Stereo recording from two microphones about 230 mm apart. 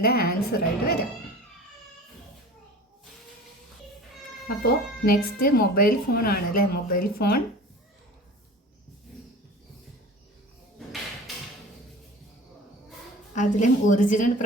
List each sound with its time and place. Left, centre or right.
0.0 s a woman's voice: left
4.4 s a woman's voice: left
13.3 s a woman's voice: left